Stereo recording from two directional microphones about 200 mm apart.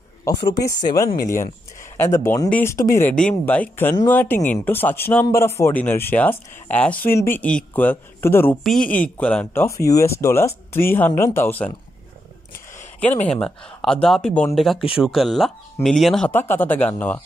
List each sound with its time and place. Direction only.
0.2 s speech: 15° left (ahead or behind)
1.0 s speech: 45° left (ahead or behind)
2.0 s speech: 15° left (ahead or behind)
13.2 s speech: 5° left (ahead or behind)